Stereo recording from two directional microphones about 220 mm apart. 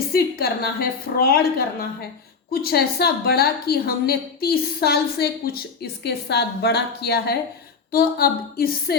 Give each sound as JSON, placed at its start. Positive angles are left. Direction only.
{"t": 0.1, "sound": "a woman's voice", "side_deg": 45}